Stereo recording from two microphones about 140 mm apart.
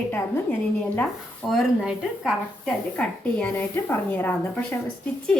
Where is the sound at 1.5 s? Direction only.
Centre (ahead or behind).